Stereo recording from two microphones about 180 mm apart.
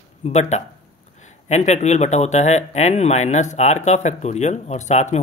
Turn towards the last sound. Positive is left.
turn(degrees=40)  # may be behind; listen again after turning